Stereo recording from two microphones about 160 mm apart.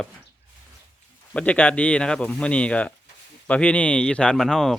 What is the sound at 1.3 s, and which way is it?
Speech, 10° left (ahead or behind).